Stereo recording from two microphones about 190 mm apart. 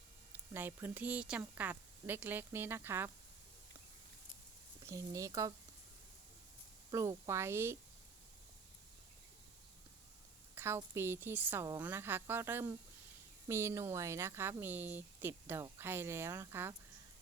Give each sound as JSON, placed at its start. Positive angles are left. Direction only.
{"t": 0.3, "sound": "speech", "side_deg": -10}
{"t": 4.9, "sound": "speech", "side_deg": -15}
{"t": 6.9, "sound": "speech", "side_deg": -15}
{"t": 10.5, "sound": "speech", "side_deg": -15}